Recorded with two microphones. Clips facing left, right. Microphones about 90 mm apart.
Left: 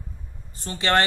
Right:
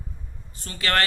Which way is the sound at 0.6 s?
25° left (ahead or behind).